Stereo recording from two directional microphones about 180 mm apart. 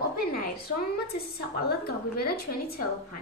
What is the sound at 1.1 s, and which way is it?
A woman's voice, 60° left (ahead or behind).